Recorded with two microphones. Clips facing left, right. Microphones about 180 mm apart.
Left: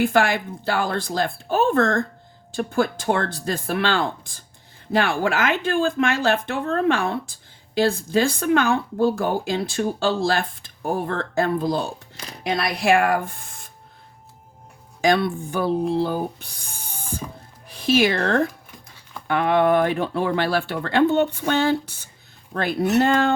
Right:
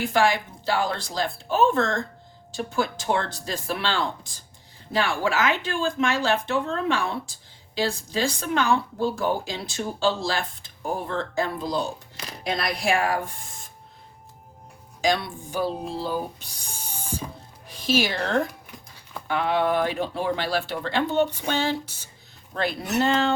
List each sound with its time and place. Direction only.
0.0 s speech: 55° left (ahead or behind)
15.0 s speech: 55° left (ahead or behind)